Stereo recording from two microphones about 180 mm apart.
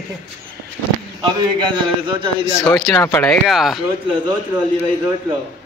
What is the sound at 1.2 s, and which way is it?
A man's voice, 25° right (ahead or behind).